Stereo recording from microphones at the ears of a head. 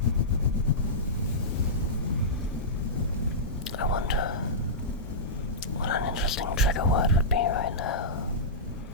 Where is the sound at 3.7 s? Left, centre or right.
Left.